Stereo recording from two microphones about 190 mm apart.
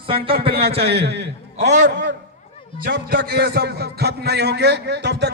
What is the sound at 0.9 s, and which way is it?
Speech, 60° right (ahead or behind).